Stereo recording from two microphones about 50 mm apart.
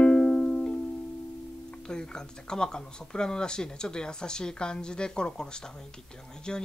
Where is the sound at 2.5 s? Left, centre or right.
Centre.